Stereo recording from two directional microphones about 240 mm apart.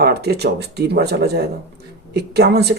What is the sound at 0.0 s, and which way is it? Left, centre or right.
Speech, right.